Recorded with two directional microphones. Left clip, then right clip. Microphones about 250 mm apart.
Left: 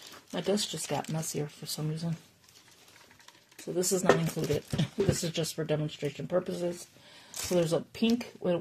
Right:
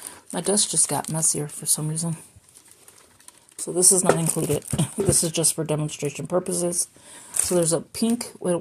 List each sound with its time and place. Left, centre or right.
0.3 s speech: right
3.6 s speech: right